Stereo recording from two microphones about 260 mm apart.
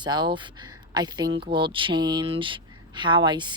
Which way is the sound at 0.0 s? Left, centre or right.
Centre.